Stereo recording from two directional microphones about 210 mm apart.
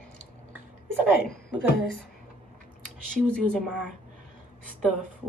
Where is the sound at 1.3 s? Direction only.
50° left (ahead or behind).